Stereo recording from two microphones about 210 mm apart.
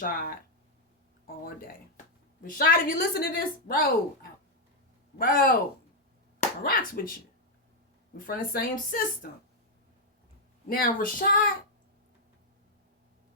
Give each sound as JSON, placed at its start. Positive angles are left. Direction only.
{"t": 0.0, "sound": "speech", "side_deg": 45}
{"t": 2.4, "sound": "speech", "side_deg": 40}
{"t": 6.6, "sound": "speech", "side_deg": 45}
{"t": 8.3, "sound": "speech", "side_deg": 45}
{"t": 10.7, "sound": "speech", "side_deg": 45}